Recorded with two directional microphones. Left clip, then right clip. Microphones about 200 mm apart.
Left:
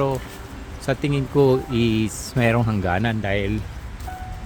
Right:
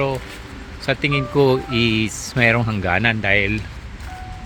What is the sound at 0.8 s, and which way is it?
Speech, 15° left (ahead or behind).